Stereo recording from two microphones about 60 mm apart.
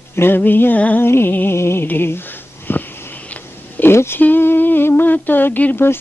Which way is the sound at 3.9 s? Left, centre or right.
Left.